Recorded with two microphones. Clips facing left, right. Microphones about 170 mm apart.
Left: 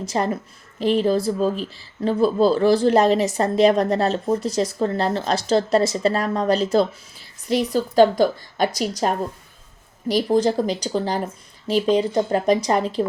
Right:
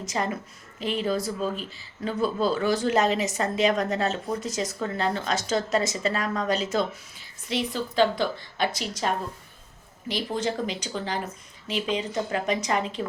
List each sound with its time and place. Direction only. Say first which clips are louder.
0.0 s a woman's voice: left 6 dB; 35° left (ahead or behind)